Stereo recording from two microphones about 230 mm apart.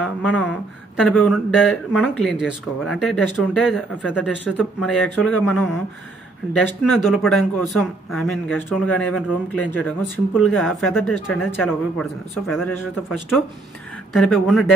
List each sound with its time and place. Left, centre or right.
0.0 s speech: centre
6.8 s speech: centre
14.1 s speech: centre